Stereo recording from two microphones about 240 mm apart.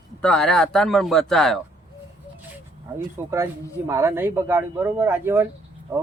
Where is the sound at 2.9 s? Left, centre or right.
Centre.